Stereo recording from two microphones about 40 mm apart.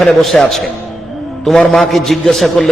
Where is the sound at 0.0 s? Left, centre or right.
Centre.